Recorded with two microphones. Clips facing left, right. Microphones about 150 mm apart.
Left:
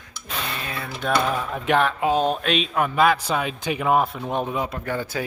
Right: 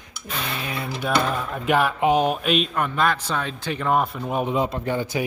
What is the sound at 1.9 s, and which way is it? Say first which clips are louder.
Speech: right 1 dB; 15° right (ahead or behind).